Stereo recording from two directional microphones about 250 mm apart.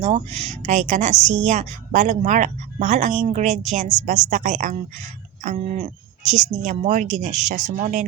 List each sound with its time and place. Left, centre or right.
0.0 s speech: right